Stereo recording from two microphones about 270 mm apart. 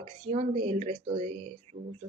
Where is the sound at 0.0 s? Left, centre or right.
Right.